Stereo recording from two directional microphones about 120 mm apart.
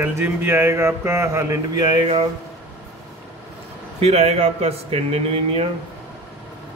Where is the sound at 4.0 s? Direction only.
60° right (ahead or behind).